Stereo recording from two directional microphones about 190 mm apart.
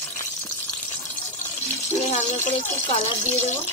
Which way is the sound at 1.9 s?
35° left (ahead or behind).